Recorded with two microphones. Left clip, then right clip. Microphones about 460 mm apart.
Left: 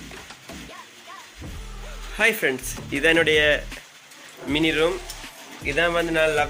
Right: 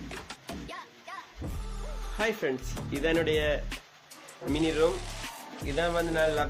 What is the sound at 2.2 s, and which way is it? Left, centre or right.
Speech, right.